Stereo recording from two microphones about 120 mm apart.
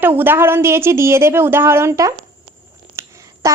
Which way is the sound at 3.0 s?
25° right (ahead or behind).